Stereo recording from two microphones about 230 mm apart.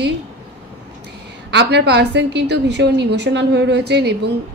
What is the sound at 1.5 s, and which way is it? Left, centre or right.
A woman's voice, right.